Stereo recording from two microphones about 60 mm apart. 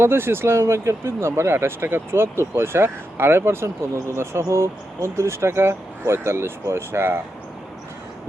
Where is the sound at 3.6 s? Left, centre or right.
Right.